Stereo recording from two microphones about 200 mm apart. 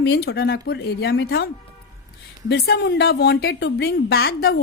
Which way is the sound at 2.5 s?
55° left (ahead or behind).